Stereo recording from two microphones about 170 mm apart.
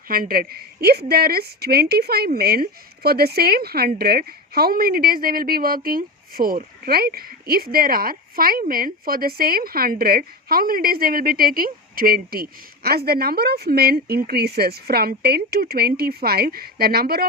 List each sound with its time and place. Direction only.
0.1 s a woman's voice: 60° right (ahead or behind)